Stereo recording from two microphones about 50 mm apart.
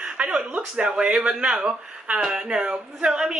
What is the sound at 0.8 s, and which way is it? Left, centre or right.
Speech, centre.